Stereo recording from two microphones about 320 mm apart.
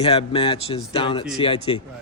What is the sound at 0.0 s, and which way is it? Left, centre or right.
Speech, centre.